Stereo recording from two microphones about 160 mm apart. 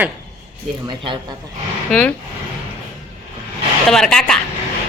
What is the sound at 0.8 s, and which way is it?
Speech, 30° right (ahead or behind).